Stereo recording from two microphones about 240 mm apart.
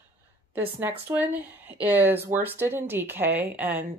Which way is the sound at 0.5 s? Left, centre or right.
Centre.